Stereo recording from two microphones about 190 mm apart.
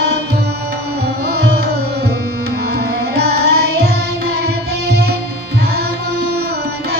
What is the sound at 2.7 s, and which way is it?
Carnatic music, 60° right (ahead or behind).